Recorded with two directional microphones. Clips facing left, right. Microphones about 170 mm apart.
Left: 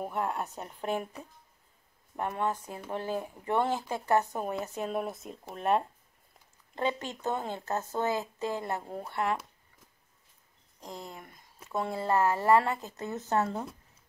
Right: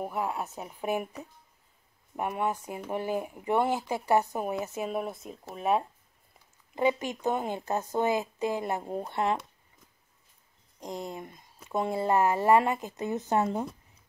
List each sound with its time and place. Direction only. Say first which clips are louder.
0.0 s speech: right 1 dB; 5° right (ahead or behind); by 9.4 s 20° right (ahead or behind)
10.8 s speech: right 6 dB; 20° right (ahead or behind)